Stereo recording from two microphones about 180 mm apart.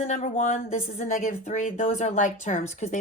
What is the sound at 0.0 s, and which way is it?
Speech, 40° left (ahead or behind).